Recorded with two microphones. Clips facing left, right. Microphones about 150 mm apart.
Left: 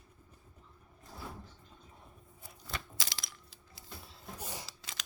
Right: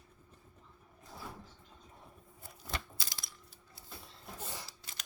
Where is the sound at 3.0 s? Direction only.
90° left.